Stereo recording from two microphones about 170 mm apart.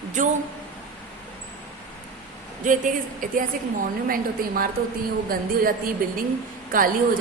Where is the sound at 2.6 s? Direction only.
50° right (ahead or behind).